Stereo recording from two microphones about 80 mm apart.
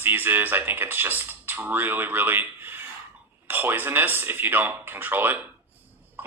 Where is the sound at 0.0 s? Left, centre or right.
Right.